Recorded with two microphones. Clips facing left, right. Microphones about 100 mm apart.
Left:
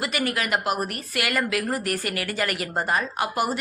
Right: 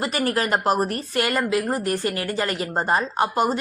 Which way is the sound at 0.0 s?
35° right (ahead or behind).